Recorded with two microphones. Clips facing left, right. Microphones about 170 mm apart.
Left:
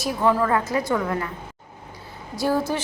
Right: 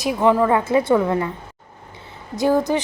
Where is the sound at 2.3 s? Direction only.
20° right (ahead or behind).